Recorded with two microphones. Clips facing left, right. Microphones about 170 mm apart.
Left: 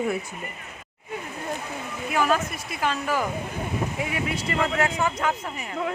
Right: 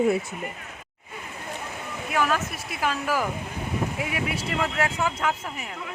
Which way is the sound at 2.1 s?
Centre (ahead or behind).